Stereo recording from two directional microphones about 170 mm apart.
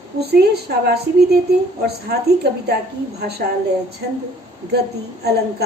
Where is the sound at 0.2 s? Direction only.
70° right (ahead or behind).